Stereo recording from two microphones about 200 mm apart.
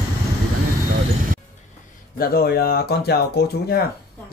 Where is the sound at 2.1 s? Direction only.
50° left (ahead or behind).